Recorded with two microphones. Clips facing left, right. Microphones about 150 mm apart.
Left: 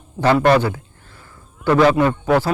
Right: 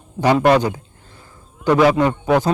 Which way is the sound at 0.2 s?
15° right (ahead or behind).